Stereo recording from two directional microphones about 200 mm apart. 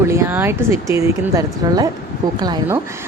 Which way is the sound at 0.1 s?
10° right (ahead or behind).